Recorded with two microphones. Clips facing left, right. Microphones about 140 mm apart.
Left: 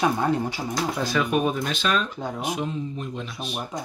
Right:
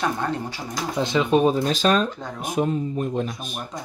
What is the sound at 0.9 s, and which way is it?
Speech, 20° right (ahead or behind).